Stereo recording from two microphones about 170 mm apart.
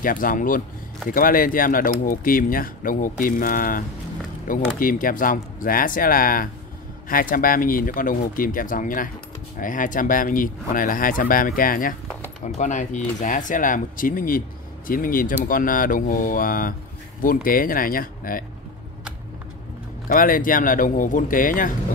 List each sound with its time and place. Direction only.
0.0 s speech: 55° left (ahead or behind)
12.1 s a sound: 5° left (ahead or behind)
12.5 s speech: 45° left (ahead or behind)
20.1 s speech: 55° left (ahead or behind)